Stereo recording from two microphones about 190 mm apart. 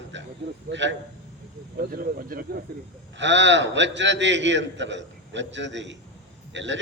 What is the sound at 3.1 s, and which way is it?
A man's voice, 70° right (ahead or behind).